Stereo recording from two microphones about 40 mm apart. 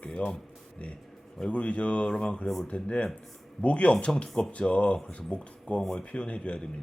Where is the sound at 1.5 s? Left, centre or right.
Left.